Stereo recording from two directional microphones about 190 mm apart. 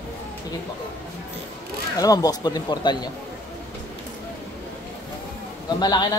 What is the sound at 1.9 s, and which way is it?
Speech, 20° left (ahead or behind).